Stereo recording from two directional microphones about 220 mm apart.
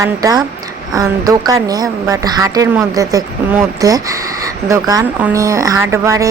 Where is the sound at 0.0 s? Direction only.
15° right (ahead or behind).